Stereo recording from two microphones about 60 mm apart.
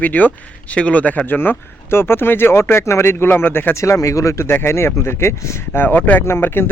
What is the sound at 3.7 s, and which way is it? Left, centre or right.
Speech, left.